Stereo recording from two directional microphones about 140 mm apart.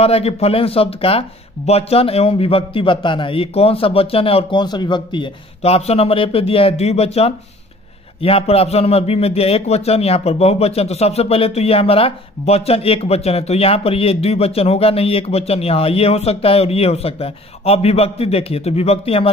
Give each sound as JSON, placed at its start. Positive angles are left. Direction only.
{"t": 0.0, "sound": "a man's voice", "side_deg": 45}
{"t": 5.6, "sound": "a man's voice", "side_deg": 50}